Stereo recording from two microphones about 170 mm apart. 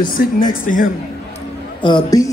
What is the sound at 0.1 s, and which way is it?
Speech, 55° left (ahead or behind).